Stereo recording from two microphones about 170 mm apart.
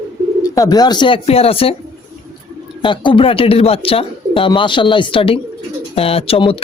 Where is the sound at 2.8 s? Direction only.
30° left (ahead or behind).